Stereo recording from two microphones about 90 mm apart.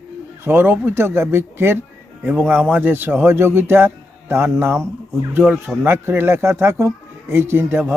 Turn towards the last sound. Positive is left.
turn(degrees=-25)  # may be behind; listen again after turning